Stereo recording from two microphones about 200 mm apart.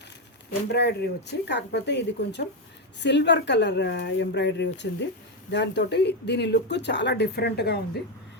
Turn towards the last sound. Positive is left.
turn(degrees=55)  # may be behind; listen again after turning